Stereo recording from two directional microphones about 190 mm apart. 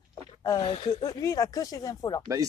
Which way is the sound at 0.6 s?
30° left (ahead or behind).